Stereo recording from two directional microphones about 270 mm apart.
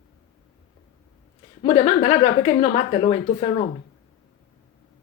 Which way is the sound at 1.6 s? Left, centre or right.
Centre.